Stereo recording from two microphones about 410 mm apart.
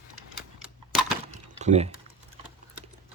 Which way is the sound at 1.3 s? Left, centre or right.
Centre.